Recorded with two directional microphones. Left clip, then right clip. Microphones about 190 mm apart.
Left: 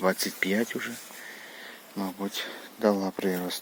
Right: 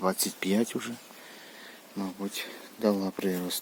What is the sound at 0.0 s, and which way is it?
Speech, centre (ahead or behind).